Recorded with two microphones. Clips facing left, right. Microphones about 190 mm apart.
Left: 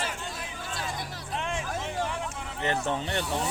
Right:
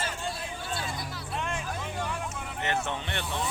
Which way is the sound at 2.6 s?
35° left (ahead or behind).